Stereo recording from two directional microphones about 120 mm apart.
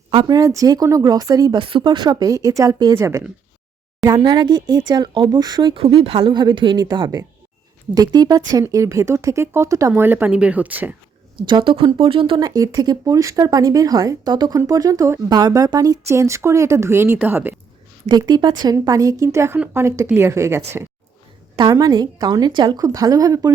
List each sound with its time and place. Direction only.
0.3 s speech: 30° right (ahead or behind)
1.5 s speech: 45° right (ahead or behind); by 3.2 s 25° right (ahead or behind)
4.0 s speech: 35° right (ahead or behind)
5.8 s a woman's voice: 50° right (ahead or behind); by 10.9 s 15° right (ahead or behind)
11.4 s a woman's voice: 40° right (ahead or behind)
12.5 s speech: 30° right (ahead or behind)
18.1 s speech: 35° right (ahead or behind)
21.6 s speech: 35° right (ahead or behind)